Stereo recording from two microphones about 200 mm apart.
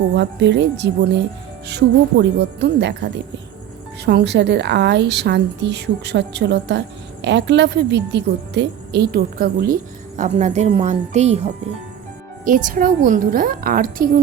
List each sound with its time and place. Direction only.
0.1 s a woman's voice: 60° right (ahead or behind)
10.2 s a woman's voice: 35° right (ahead or behind)
12.5 s a woman's voice: 40° right (ahead or behind)